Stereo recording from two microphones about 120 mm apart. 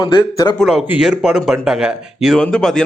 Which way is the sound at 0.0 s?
35° left (ahead or behind).